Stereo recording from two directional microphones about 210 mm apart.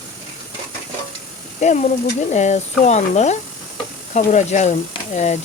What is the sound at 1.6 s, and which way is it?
Speech, 35° left (ahead or behind).